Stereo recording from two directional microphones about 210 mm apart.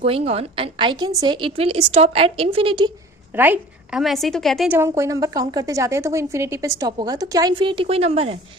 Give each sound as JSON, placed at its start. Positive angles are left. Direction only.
{"t": 0.0, "sound": "a woman's voice", "side_deg": -30}
{"t": 3.3, "sound": "a woman's voice", "side_deg": -10}
{"t": 4.8, "sound": "a woman's voice", "side_deg": -15}